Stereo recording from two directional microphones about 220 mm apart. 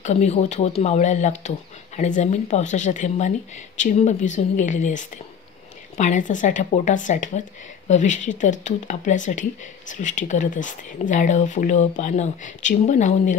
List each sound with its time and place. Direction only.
0.0 s speech: 30° left (ahead or behind)